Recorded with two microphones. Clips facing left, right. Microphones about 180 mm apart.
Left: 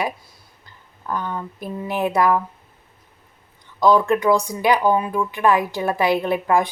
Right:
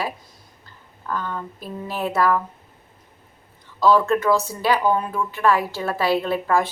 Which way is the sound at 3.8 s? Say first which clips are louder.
Left 1 dB; 15° left (ahead or behind).